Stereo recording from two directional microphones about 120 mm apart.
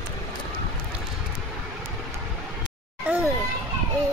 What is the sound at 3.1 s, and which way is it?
Children playing, 10° right (ahead or behind).